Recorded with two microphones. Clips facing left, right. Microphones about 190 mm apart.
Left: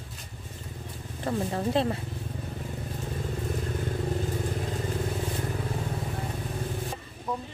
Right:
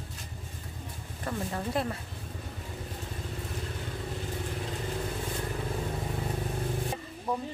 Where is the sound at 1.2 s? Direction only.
30° left (ahead or behind).